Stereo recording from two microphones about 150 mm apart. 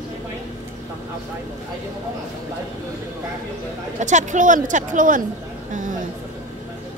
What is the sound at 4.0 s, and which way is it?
A woman's voice, 55° right (ahead or behind).